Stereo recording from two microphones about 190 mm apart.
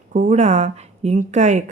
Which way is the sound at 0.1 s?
40° right (ahead or behind).